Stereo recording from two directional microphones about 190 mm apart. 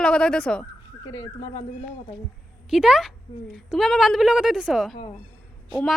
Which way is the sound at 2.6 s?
Centre (ahead or behind).